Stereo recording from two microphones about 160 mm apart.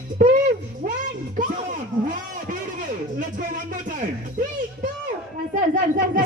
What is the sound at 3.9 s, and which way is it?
Speech, 55° right (ahead or behind).